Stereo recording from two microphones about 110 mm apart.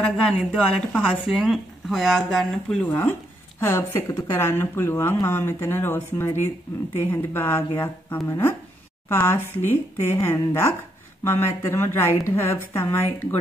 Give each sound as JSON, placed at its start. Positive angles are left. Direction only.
{"t": 0.0, "sound": "speech", "side_deg": 5}
{"t": 1.0, "sound": "speech", "side_deg": -5}
{"t": 2.8, "sound": "a woman's voice", "side_deg": 15}